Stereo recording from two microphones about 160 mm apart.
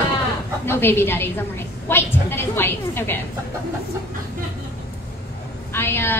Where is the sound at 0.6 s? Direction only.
15° left (ahead or behind).